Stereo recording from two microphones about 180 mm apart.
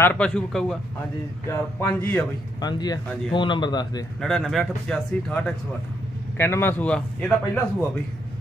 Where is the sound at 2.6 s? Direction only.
20° left (ahead or behind).